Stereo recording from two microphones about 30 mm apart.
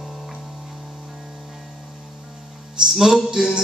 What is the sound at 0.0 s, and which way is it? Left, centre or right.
Music, centre.